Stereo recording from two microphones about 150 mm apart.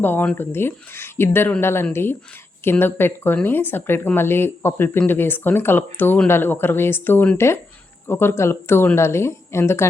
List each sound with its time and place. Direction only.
0.0 s speech: 15° left (ahead or behind)